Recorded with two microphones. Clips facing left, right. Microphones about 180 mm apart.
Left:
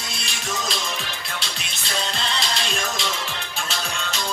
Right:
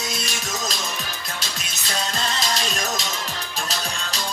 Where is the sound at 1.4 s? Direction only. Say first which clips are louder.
Even; 45° right (ahead or behind).